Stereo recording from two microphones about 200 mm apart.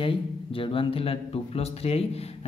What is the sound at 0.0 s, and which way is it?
Speech, 25° left (ahead or behind).